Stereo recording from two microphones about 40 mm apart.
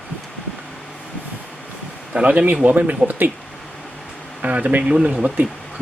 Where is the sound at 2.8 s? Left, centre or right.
Right.